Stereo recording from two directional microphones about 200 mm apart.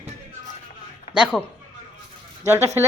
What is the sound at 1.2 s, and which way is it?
Speech, centre (ahead or behind).